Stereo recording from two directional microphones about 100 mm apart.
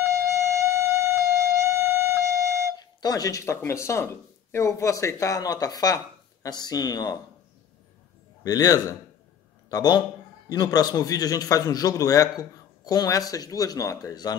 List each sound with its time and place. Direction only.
0.0 s music: 25° right (ahead or behind)
2.8 s a man's voice: 40° left (ahead or behind)
8.5 s a man's voice: 40° left (ahead or behind)